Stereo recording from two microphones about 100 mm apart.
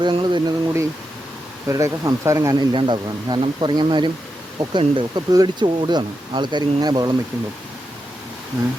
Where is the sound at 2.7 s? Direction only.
55° right (ahead or behind).